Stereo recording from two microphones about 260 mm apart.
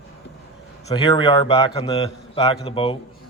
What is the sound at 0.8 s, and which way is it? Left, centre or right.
A man's voice, centre.